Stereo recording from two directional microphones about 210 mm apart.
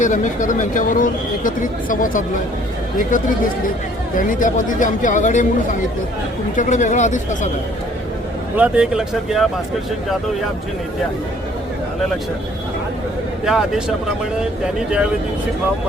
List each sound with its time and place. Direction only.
0.0 s speech: 35° left (ahead or behind)
4.1 s speech: 40° left (ahead or behind)
6.6 s speech: 35° left (ahead or behind)
8.5 s speech: 5° right (ahead or behind)
13.4 s speech: centre (ahead or behind)